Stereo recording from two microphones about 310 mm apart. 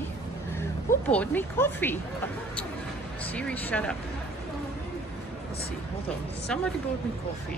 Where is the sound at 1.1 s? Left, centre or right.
Centre.